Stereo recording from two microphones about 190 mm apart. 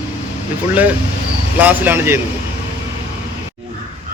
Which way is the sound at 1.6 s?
10° right (ahead or behind).